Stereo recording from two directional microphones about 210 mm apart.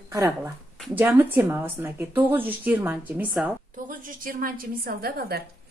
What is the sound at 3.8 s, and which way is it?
A woman's voice, 40° right (ahead or behind).